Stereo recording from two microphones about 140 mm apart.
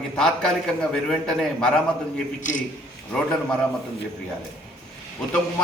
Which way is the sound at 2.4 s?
65° left (ahead or behind).